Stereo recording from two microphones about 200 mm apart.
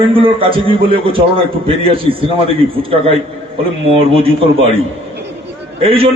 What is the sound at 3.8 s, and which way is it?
Speech, 30° right (ahead or behind).